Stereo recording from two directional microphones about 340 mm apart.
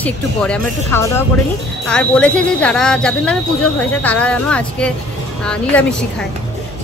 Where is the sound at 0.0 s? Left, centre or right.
Centre.